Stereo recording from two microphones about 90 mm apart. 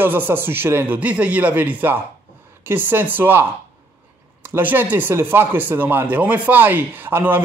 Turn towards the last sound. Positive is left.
turn(degrees=-25)  # may be behind; listen again after turning